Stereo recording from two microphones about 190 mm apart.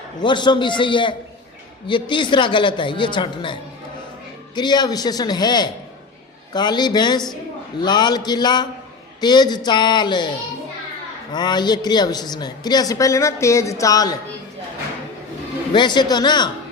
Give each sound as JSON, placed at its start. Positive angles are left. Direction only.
{"t": 0.2, "sound": "a woman's voice", "side_deg": 25}
{"t": 11.3, "sound": "a woman's voice", "side_deg": 20}
{"t": 15.7, "sound": "a woman's voice", "side_deg": 25}